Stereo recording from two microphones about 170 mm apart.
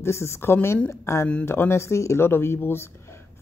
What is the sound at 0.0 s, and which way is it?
Speech, 15° left (ahead or behind).